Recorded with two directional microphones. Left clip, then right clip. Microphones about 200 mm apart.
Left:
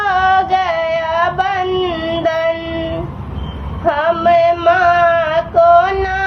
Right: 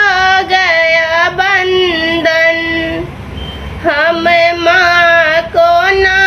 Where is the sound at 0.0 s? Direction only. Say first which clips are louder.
Right 5 dB; 15° right (ahead or behind).